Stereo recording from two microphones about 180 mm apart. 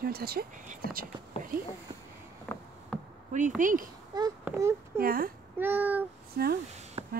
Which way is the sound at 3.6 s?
45° right (ahead or behind).